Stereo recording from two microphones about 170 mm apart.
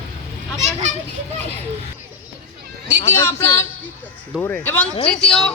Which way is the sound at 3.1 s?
15° left (ahead or behind).